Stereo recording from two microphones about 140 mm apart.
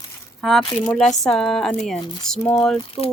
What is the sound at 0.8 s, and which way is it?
A woman's voice, 5° left (ahead or behind).